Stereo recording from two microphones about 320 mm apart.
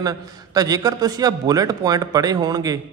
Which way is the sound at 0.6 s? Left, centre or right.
Centre.